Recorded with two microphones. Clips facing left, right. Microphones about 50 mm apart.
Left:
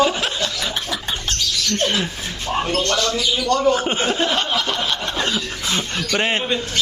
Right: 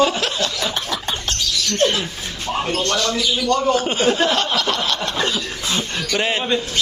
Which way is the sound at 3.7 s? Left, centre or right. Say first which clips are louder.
Right 2 dB; left.